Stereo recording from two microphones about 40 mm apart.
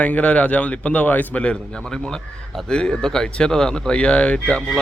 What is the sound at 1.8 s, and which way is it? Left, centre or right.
A man's voice, centre.